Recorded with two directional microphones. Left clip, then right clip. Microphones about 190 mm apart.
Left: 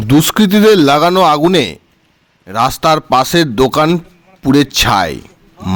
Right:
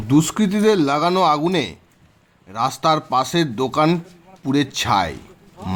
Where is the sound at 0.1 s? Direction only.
40° left (ahead or behind).